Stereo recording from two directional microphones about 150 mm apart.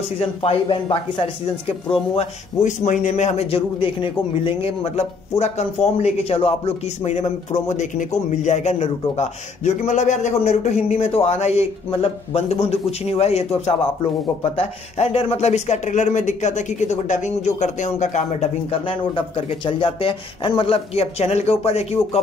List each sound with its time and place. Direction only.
0.2 s speech: 40° left (ahead or behind)
2.1 s speech: 50° left (ahead or behind)